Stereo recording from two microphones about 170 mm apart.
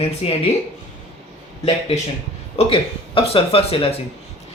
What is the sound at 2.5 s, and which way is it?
Speech, 35° left (ahead or behind).